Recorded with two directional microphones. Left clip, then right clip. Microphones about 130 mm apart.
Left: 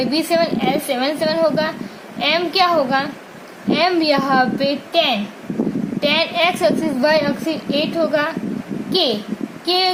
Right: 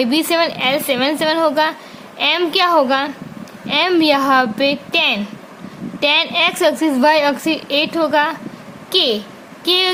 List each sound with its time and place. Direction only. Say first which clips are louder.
0.0 s a woman's voice: right 2 dB; 90° right
6.0 s a woman's voice: right 2 dB; 70° right (ahead or behind); by 9.1 s 90° right
9.6 s a woman's voice: right 2 dB; 80° right